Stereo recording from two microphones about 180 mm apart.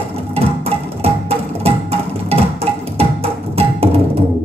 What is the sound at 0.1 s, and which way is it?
Music, 35° right (ahead or behind).